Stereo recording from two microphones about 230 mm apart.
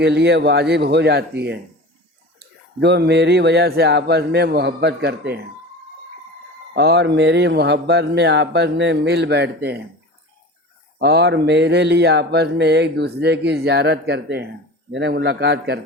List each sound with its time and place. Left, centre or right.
0.0 s mantra: right
2.8 s mantra: right
6.7 s mantra: right
10.9 s mantra: right